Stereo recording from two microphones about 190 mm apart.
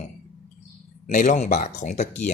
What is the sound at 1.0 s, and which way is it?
Speech, 40° left (ahead or behind).